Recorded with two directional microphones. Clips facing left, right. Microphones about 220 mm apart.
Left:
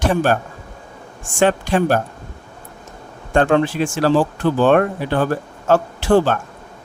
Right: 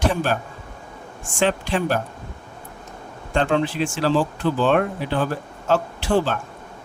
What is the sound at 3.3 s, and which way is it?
A man's voice, 50° left (ahead or behind).